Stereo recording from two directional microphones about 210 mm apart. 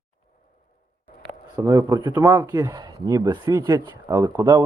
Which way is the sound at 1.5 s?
15° right (ahead or behind).